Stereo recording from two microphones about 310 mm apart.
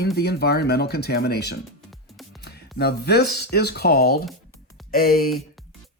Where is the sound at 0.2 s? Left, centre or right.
Left.